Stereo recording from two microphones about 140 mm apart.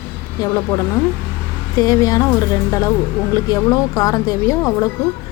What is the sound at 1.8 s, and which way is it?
A woman's voice, 25° left (ahead or behind).